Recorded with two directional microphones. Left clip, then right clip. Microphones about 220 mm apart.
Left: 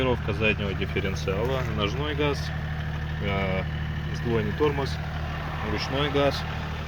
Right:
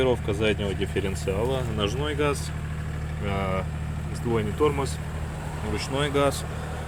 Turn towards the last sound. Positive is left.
turn(degrees=-5)  # may be behind; listen again after turning